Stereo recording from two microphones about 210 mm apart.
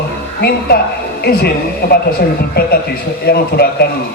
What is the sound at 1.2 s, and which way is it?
A man's voice, 50° left (ahead or behind).